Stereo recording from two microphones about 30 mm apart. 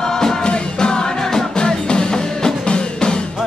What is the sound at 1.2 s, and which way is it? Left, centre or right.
Music, centre.